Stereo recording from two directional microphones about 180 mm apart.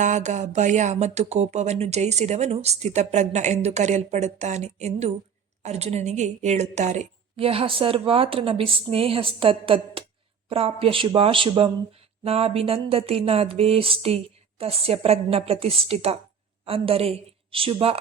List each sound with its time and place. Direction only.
0.0 s speech: 40° right (ahead or behind)